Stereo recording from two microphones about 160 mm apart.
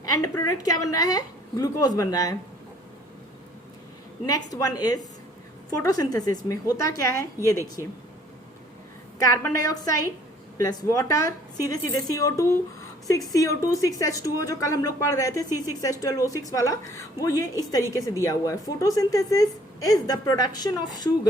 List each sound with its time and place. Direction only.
0.1 s a woman's voice: 25° left (ahead or behind)
4.3 s a woman's voice: 25° left (ahead or behind)
9.1 s a woman's voice: 20° left (ahead or behind)